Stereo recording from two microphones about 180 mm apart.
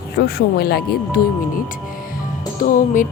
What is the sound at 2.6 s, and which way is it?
Speech, 50° left (ahead or behind).